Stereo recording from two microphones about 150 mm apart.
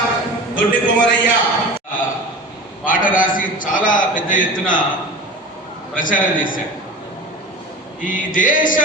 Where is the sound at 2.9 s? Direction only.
65° left (ahead or behind).